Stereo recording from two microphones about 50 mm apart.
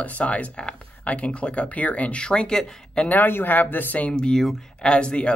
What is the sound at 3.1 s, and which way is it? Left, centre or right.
Speech, left.